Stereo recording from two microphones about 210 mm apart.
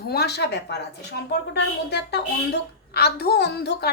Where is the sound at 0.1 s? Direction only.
50° left (ahead or behind).